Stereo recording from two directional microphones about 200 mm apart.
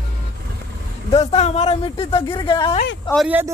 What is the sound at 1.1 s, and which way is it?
Speech, 30° left (ahead or behind).